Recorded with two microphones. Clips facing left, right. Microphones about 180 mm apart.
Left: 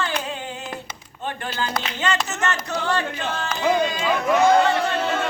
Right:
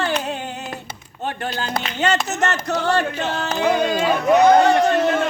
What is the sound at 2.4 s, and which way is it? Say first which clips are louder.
Speech: right 4 dB; 70° right (ahead or behind).